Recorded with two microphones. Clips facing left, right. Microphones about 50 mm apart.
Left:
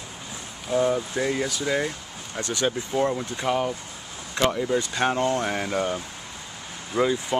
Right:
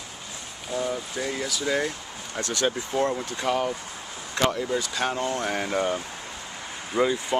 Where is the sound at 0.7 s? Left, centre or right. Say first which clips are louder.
Left 6 dB; centre.